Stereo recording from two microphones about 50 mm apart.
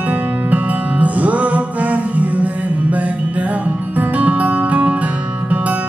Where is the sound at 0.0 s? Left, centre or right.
Right.